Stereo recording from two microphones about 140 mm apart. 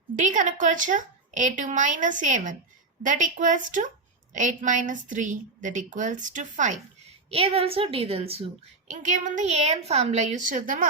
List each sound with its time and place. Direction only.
0.2 s a woman's voice: 65° right (ahead or behind)
7.3 s a woman's voice: 45° right (ahead or behind)
8.9 s a woman's voice: 65° right (ahead or behind)